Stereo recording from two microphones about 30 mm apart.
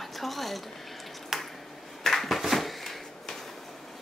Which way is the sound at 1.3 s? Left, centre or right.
Centre.